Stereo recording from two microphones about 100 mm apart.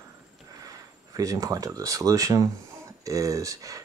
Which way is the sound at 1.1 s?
35° right (ahead or behind).